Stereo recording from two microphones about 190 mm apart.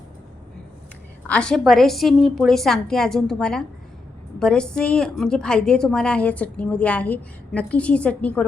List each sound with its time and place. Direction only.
1.3 s a woman's voice: 5° left (ahead or behind)